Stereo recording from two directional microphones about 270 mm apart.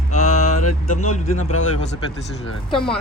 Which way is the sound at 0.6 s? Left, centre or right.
Left.